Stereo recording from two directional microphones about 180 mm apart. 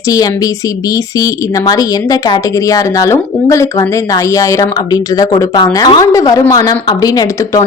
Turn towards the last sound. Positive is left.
turn(degrees=20)  # may be behind; listen again after turning